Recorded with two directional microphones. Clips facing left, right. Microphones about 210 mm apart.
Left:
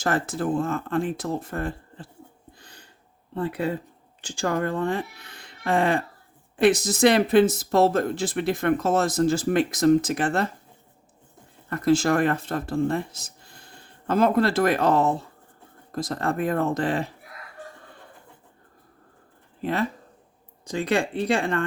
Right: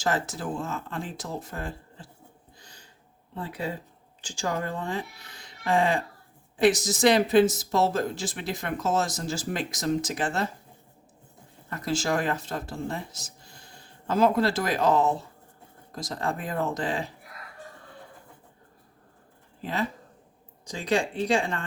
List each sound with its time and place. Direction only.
0.0 s speech: 55° left (ahead or behind)
2.6 s a sound: 60° left (ahead or behind)
3.3 s speech: 60° left (ahead or behind)
11.7 s speech: 55° left (ahead or behind)
20.7 s speech: 55° left (ahead or behind)